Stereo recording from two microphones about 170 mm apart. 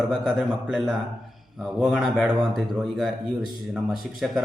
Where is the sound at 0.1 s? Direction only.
Centre (ahead or behind).